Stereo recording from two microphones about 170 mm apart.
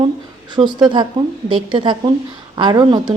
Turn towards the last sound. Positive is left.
turn(degrees=-25)  # may be behind; listen again after turning